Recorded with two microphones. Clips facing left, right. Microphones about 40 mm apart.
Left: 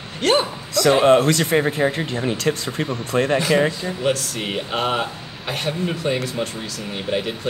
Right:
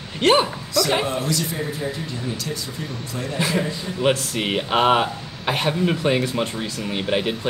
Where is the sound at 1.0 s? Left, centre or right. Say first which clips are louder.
Left 9 dB; left.